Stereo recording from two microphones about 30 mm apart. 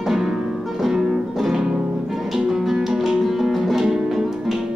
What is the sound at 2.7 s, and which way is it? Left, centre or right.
Music, centre.